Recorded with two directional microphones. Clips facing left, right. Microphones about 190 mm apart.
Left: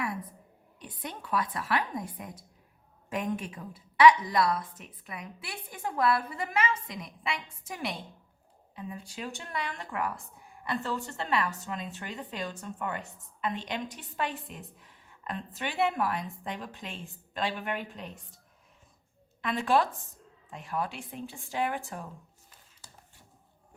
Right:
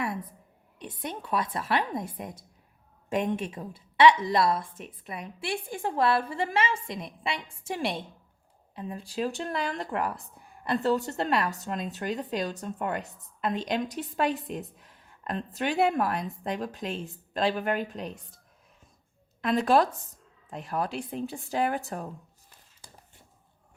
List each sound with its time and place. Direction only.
0.8 s a woman's voice: 25° right (ahead or behind)
19.4 s a woman's voice: 40° right (ahead or behind)